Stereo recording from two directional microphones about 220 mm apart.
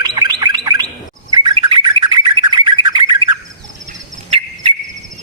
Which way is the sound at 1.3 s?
20° right (ahead or behind).